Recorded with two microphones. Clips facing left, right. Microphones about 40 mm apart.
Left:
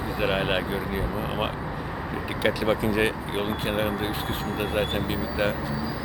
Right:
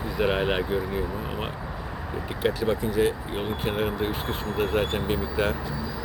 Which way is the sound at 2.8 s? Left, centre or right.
Left.